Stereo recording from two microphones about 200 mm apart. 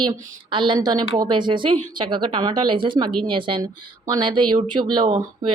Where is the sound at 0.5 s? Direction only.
25° right (ahead or behind).